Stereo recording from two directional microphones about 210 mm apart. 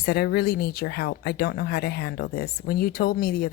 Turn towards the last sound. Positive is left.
turn(degrees=45)  # may be behind; listen again after turning